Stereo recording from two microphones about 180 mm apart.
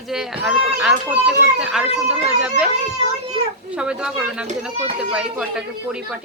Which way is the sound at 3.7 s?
5° right (ahead or behind).